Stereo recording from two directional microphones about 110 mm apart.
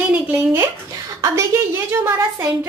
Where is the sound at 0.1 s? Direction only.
15° right (ahead or behind).